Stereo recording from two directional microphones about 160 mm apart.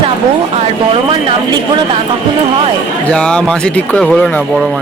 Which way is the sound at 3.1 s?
5° left (ahead or behind).